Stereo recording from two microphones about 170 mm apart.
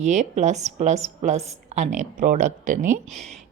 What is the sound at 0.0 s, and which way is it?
A woman's voice, 45° right (ahead or behind).